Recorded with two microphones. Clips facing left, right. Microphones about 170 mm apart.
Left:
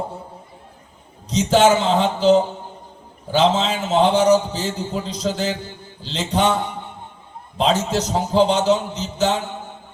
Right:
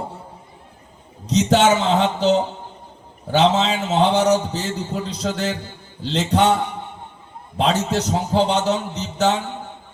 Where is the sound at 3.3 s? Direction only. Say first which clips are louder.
Right 1 dB; 65° right (ahead or behind).